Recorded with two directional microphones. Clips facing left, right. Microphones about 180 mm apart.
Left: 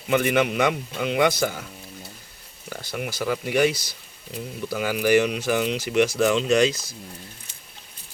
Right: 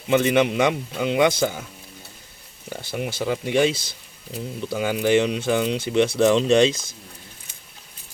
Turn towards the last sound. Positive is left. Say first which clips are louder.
# right 3 dB
turn(degrees=-25)  # may be behind; listen again after turning